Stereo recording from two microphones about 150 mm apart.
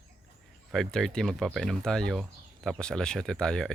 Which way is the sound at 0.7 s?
5° left (ahead or behind).